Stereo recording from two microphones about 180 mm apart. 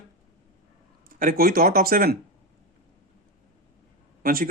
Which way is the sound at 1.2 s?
55° right (ahead or behind).